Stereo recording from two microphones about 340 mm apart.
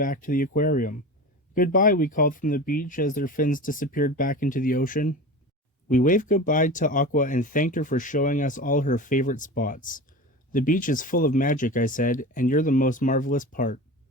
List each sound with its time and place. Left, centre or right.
0.0 s speech: left